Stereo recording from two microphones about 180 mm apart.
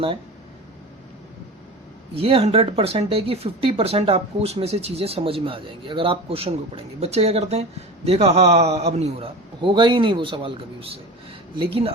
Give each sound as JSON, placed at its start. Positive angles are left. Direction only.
{"t": 2.1, "sound": "a man's voice", "side_deg": -30}